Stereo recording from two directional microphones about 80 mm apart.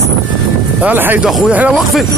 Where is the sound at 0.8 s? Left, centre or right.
Right.